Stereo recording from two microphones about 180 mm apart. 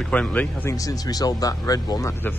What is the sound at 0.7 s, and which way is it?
Speech, 20° left (ahead or behind).